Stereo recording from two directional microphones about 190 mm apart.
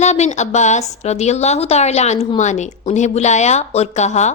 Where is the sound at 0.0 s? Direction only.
35° left (ahead or behind).